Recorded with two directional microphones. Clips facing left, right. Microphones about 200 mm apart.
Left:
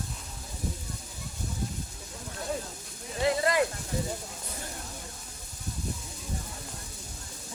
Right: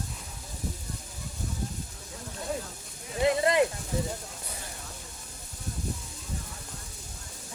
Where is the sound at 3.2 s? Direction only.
20° right (ahead or behind).